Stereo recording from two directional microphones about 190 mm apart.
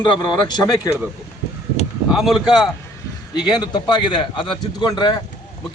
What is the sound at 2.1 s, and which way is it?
Speech, centre (ahead or behind).